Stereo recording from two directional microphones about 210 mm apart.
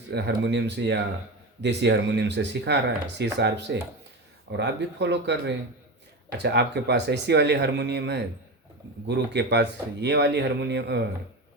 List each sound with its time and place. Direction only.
0.1 s speech: 55° right (ahead or behind)
4.5 s speech: 55° right (ahead or behind)